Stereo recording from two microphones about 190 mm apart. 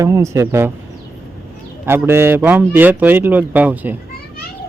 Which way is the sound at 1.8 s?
10° right (ahead or behind).